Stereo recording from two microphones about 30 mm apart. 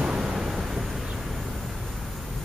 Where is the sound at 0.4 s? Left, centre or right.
Centre.